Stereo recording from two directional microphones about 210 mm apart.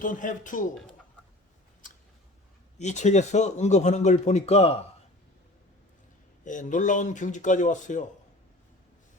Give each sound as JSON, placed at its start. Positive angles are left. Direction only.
{"t": 0.0, "sound": "speech", "side_deg": 40}
{"t": 2.7, "sound": "speech", "side_deg": 35}
{"t": 6.4, "sound": "speech", "side_deg": 35}